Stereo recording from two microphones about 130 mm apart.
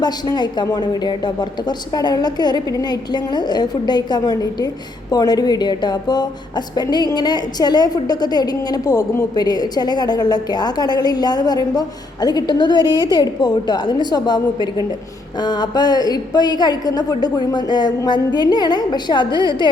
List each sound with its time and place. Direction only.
0.0 s a woman's voice: 30° left (ahead or behind)